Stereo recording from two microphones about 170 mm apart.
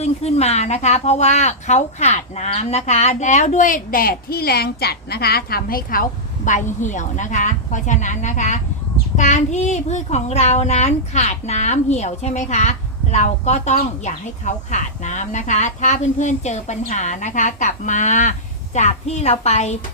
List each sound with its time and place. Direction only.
0.0 s a child's voice: 40° left (ahead or behind)